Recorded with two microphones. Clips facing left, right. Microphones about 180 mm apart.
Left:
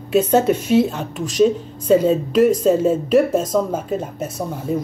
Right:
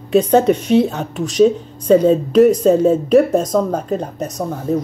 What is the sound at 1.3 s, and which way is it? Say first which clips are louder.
Speech: right 3 dB; 5° left (ahead or behind).